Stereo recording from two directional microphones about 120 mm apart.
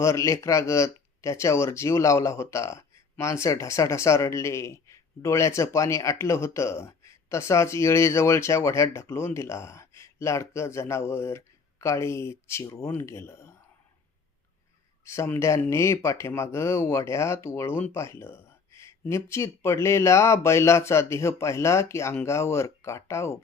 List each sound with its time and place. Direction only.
0.0 s speech: 25° left (ahead or behind)
15.0 s speech: 25° left (ahead or behind)